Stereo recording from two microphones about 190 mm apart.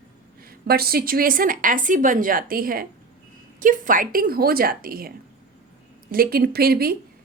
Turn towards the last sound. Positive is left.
turn(degrees=-55)  # may be behind; listen again after turning